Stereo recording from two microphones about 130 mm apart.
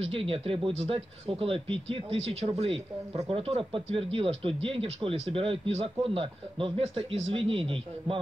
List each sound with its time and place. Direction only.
0.0 s speech: 45° right (ahead or behind)